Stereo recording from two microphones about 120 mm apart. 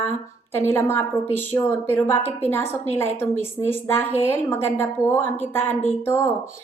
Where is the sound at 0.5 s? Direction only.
20° left (ahead or behind).